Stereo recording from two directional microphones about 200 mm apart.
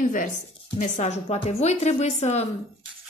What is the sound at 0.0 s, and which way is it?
A woman's voice, 40° left (ahead or behind).